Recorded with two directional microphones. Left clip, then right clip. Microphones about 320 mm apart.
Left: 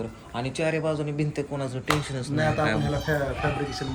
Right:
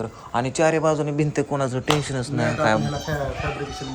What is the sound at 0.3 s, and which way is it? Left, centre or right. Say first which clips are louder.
Speech: right 7 dB; right.